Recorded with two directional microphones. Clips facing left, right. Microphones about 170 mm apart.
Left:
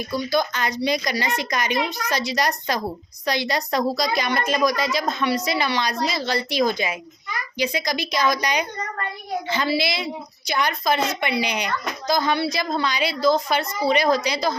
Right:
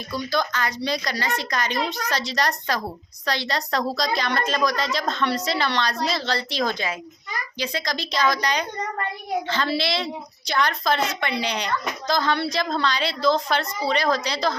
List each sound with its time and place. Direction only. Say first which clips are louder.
0.3 s a woman's voice: left 1 dB; 15° left (ahead or behind)